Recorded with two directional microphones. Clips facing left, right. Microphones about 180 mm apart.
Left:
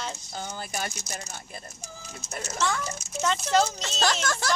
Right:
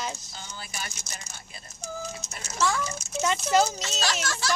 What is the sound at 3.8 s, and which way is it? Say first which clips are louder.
Speech: left 3 dB; 50° left (ahead or behind).